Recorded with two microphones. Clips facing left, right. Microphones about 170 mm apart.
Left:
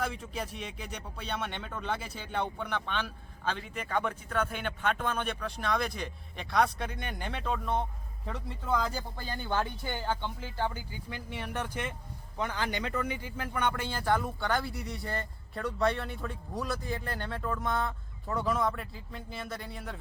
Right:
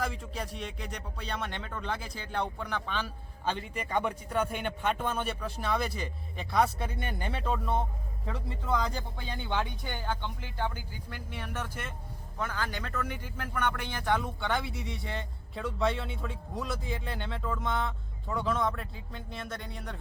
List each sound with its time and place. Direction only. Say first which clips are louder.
0.0 s speech: even; centre (ahead or behind)